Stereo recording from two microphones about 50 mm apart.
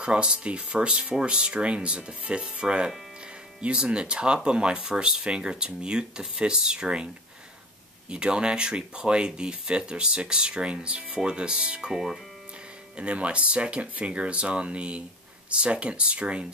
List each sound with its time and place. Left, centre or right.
0.0 s speech: centre
8.1 s speech: centre
11.9 s speech: centre
12.9 s speech: right